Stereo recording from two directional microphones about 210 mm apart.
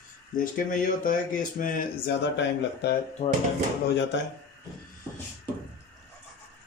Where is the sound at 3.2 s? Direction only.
30° left (ahead or behind).